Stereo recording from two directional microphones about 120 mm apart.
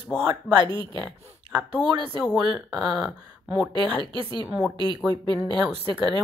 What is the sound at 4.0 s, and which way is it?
Speech, 45° right (ahead or behind).